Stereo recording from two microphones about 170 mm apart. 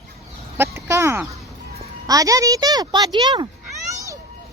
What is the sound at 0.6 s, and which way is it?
Speech, 15° right (ahead or behind).